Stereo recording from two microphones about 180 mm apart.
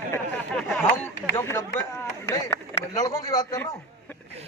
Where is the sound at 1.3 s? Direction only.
15° left (ahead or behind).